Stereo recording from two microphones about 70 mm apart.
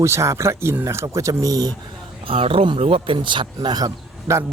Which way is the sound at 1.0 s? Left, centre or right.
Right.